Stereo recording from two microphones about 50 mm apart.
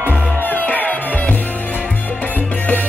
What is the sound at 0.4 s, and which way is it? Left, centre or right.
Music, left.